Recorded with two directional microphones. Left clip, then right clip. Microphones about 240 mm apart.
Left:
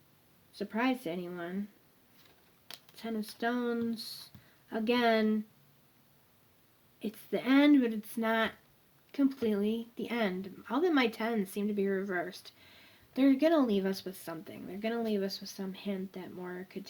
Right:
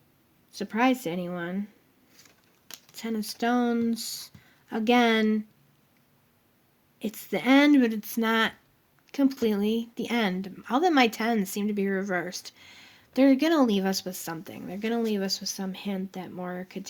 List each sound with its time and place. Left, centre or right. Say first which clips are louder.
0.5 s speech: right 8 dB; right
2.9 s speech: right 6 dB; right
7.0 s speech: right 6 dB; right